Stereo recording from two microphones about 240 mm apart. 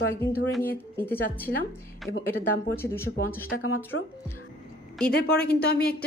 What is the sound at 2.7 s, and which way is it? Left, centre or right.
Speech, centre.